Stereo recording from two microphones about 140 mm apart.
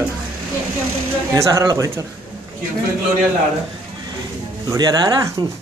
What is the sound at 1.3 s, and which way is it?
Speech, 25° right (ahead or behind).